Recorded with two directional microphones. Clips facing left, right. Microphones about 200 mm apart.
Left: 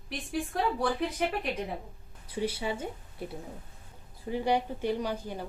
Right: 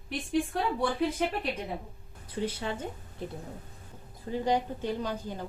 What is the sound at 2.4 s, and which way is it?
Speech, 10° left (ahead or behind).